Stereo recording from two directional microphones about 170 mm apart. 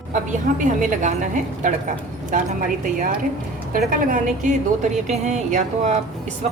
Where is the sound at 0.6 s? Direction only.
50° right (ahead or behind).